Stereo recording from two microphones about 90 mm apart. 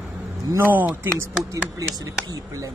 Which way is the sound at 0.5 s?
25° right (ahead or behind).